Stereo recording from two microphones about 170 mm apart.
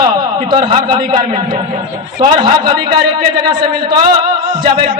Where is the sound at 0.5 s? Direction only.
25° right (ahead or behind).